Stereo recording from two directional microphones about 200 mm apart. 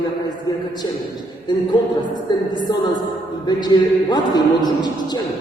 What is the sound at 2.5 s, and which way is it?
A man's voice, 20° left (ahead or behind).